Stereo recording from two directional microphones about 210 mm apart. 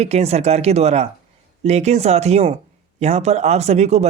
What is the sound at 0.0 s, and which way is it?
A man's voice, 30° right (ahead or behind).